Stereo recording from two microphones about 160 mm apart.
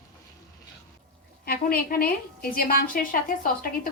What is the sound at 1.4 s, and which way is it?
A woman's voice, 70° left (ahead or behind).